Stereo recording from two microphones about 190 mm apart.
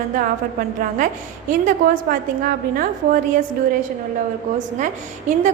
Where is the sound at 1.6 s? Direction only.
50° right (ahead or behind).